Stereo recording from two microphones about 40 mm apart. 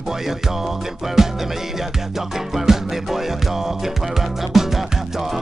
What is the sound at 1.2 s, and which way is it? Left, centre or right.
Music, centre.